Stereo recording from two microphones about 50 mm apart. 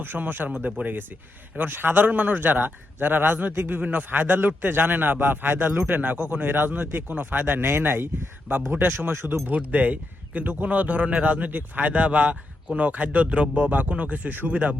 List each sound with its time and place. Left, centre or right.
0.0 s speech: right
0.5 s a man's voice: right
8.9 s speech: right
9.5 s a man's voice: right